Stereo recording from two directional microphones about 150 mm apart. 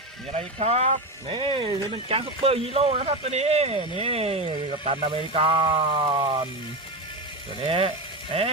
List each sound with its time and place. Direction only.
0.3 s speech: 45° right (ahead or behind)
7.7 s speech: 35° right (ahead or behind)